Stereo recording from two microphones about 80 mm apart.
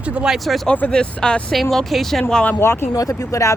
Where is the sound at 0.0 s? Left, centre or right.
Centre.